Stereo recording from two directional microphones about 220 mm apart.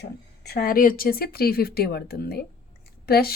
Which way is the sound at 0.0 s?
45° left (ahead or behind).